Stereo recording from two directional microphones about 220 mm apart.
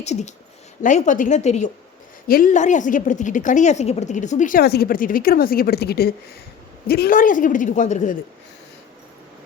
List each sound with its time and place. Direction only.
0.0 s a woman's voice: 30° left (ahead or behind)